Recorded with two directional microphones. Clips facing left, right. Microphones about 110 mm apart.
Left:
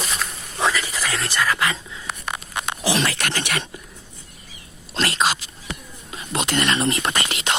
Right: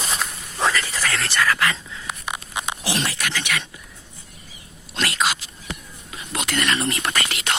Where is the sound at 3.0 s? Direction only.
60° left (ahead or behind).